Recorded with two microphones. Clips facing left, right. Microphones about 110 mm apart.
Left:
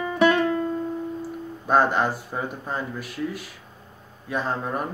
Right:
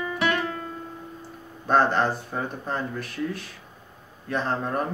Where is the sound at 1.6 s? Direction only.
10° left (ahead or behind).